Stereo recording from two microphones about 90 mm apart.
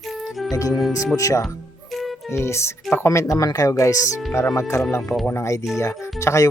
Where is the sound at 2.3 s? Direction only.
30° left (ahead or behind).